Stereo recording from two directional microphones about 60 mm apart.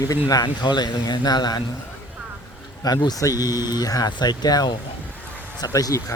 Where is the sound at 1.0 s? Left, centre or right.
Left.